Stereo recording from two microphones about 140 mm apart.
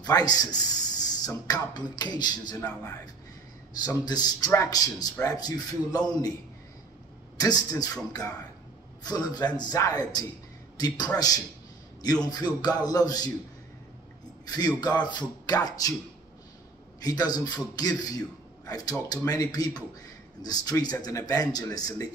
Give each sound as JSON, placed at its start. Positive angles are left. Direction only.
{"t": 0.0, "sound": "speech", "side_deg": 30}
{"t": 3.8, "sound": "speech", "side_deg": 30}
{"t": 7.3, "sound": "speech", "side_deg": 25}
{"t": 14.4, "sound": "a man's voice", "side_deg": 30}
{"t": 17.0, "sound": "speech", "side_deg": 30}